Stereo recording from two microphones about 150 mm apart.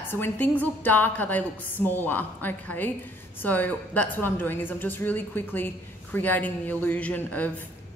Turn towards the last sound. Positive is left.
turn(degrees=10)  # may be behind; listen again after turning